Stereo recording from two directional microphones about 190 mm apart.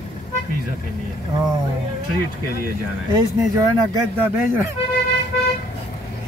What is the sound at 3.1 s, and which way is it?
Speech, 20° right (ahead or behind).